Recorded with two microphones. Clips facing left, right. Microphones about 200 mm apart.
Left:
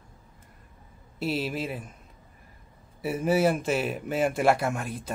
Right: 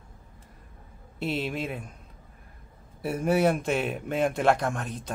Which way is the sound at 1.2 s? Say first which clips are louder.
Left 1 dB; 5° left (ahead or behind).